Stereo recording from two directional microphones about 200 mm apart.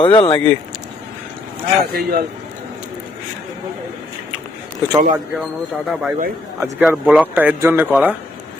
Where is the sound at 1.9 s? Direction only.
50° right (ahead or behind).